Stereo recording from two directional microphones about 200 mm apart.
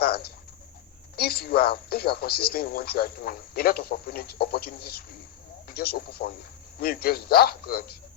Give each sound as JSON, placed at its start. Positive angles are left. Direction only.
{"t": 0.0, "sound": "bird", "side_deg": 50}
{"t": 1.1, "sound": "speech", "side_deg": 50}